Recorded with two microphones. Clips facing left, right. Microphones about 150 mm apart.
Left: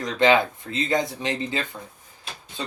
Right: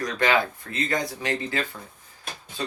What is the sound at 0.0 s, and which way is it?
Speech, 20° left (ahead or behind).